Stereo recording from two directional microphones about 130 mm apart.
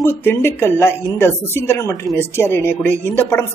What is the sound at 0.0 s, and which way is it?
A woman's voice, 15° left (ahead or behind).